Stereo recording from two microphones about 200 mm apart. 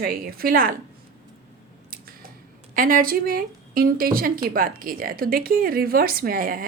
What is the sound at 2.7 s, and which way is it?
A woman's voice, 45° right (ahead or behind).